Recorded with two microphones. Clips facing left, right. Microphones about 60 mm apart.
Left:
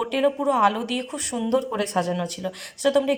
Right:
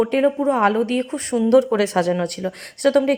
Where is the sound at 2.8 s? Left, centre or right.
Right.